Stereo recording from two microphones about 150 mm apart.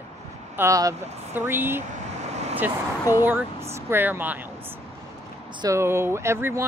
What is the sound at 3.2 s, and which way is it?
Speech, 15° right (ahead or behind).